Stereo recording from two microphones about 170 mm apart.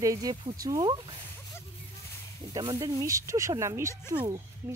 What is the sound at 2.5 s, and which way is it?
A child's voice, 20° right (ahead or behind).